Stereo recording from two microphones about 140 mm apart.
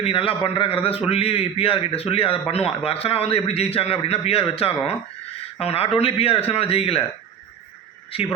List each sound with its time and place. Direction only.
0.0 s a man's voice: 40° left (ahead or behind)